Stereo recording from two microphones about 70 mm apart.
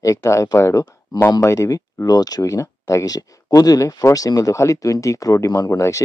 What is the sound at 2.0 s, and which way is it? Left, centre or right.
Speech, left.